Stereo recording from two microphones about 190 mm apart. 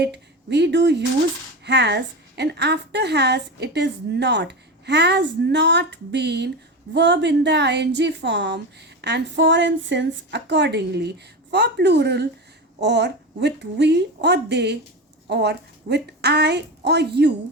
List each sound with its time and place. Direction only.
0.0 s a woman's voice: 65° right (ahead or behind)